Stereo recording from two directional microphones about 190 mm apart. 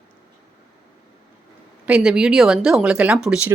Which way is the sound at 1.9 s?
5° right (ahead or behind).